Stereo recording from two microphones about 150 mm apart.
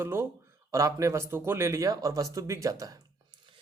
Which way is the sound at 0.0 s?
15° right (ahead or behind).